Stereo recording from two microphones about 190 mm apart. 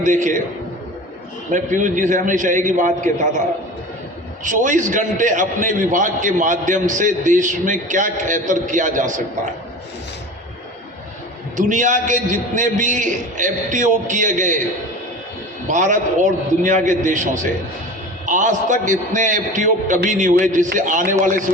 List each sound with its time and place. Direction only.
0.0 s a man's voice: 40° right (ahead or behind)
1.5 s a man's voice: 40° right (ahead or behind)
4.4 s a man's voice: 40° right (ahead or behind)
11.5 s a man's voice: 40° right (ahead or behind)
15.6 s a man's voice: 40° right (ahead or behind)